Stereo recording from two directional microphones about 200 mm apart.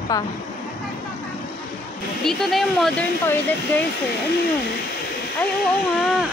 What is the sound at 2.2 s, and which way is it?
Speech, centre (ahead or behind).